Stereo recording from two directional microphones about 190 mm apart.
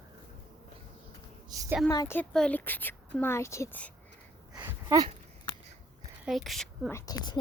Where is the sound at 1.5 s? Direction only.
15° right (ahead or behind).